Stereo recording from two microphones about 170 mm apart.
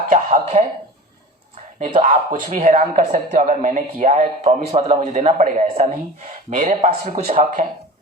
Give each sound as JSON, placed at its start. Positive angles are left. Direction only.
{"t": 0.1, "sound": "speech", "side_deg": -40}
{"t": 2.0, "sound": "speech", "side_deg": -50}